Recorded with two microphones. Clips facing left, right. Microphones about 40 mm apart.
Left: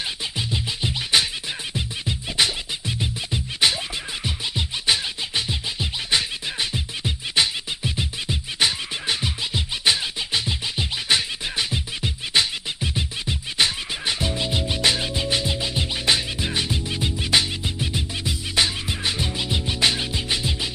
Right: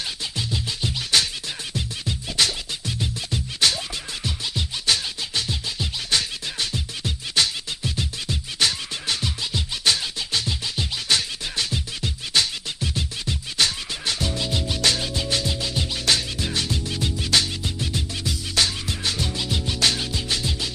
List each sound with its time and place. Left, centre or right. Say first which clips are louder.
0.4 s music: left 1 dB; centre